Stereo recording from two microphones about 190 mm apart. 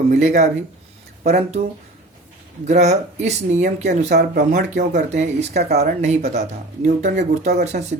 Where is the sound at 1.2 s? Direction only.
35° right (ahead or behind).